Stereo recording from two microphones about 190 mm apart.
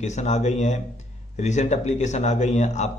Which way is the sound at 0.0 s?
35° left (ahead or behind).